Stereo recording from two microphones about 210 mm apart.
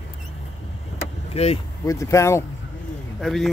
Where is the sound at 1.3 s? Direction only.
30° left (ahead or behind).